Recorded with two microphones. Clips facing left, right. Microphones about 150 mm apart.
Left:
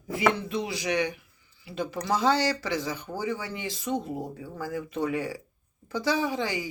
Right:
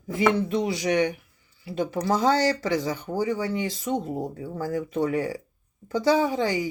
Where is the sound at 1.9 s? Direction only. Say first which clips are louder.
Right 2 dB; 40° right (ahead or behind).